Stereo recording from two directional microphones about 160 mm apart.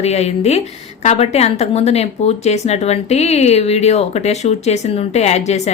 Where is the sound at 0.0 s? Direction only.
40° left (ahead or behind).